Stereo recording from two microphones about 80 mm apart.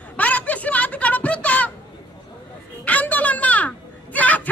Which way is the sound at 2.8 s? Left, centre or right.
Centre.